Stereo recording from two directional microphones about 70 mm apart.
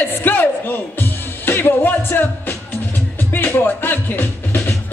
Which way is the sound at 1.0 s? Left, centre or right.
Left.